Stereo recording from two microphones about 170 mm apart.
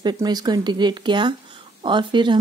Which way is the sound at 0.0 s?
25° right (ahead or behind).